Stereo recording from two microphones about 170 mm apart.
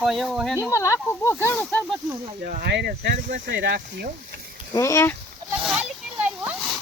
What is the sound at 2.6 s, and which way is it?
Speech, 90° right.